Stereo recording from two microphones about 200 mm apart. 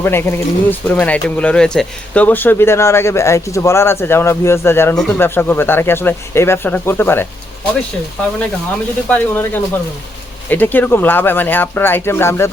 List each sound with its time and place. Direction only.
0.0 s speech: 10° left (ahead or behind)
9.0 s speech: 10° left (ahead or behind)